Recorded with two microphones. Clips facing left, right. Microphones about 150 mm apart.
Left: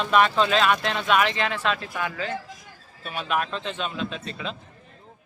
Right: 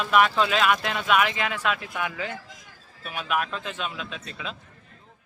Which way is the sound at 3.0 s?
5° right (ahead or behind).